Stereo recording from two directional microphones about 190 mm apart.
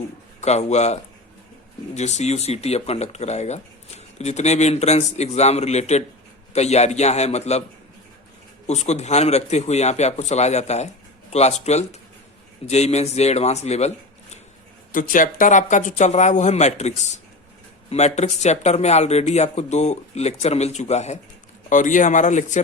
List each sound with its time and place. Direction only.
0.4 s speech: 35° left (ahead or behind)
2.0 s speech: 35° left (ahead or behind)
8.6 s speech: 35° left (ahead or behind)
14.9 s speech: 45° left (ahead or behind)